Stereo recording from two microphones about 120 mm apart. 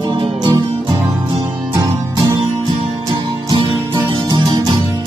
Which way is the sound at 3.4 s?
35° right (ahead or behind).